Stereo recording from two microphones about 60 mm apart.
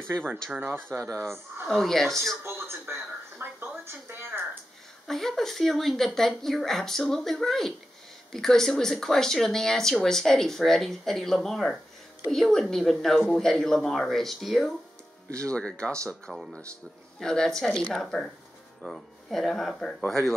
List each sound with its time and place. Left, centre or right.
0.1 s speech: right
0.9 s speech: right
1.7 s speech: centre
2.4 s a sound: right
5.0 s speech: centre
15.4 s speech: centre